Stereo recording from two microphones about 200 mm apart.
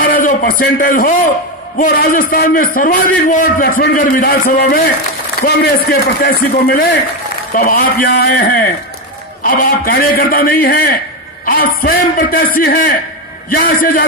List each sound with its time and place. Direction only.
0.0 s a man's voice: 45° left (ahead or behind)